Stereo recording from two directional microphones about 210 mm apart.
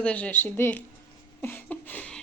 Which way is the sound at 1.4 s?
10° left (ahead or behind).